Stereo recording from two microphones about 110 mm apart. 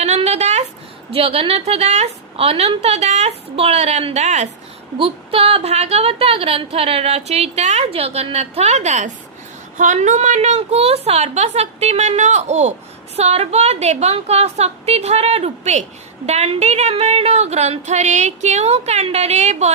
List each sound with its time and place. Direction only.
0.0 s a sound: 80° right
1.1 s a woman's voice: 60° right (ahead or behind); by 4.4 s 90° right
4.9 s a woman's voice: 60° right (ahead or behind); by 12.7 s 90° right
13.1 s a woman's voice: 70° right (ahead or behind); by 19.7 s 90° right